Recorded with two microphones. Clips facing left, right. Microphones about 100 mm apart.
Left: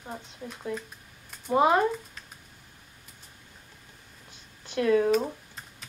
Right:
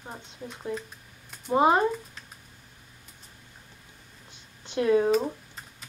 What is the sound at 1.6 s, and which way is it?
Speech, 25° right (ahead or behind).